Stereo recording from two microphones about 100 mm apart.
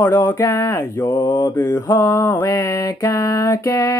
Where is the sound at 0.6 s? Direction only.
35° left (ahead or behind).